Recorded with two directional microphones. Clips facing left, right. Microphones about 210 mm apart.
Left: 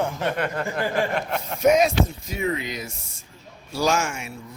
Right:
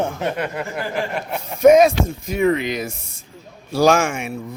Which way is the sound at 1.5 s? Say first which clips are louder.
Right 7 dB; 50° right (ahead or behind).